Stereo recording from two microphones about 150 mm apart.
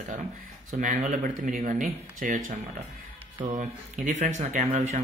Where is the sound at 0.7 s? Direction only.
60° right (ahead or behind).